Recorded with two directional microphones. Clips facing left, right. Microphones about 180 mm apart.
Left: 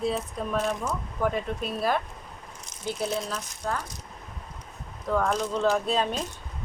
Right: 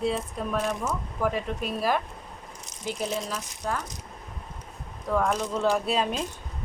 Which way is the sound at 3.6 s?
10° right (ahead or behind).